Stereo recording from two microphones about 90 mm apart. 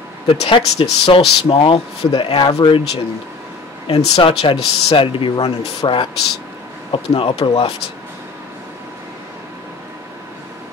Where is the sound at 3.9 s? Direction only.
90° left.